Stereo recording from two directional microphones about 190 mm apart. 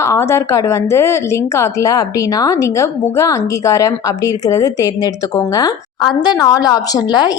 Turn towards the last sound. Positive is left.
turn(degrees=20)  # may be behind; listen again after turning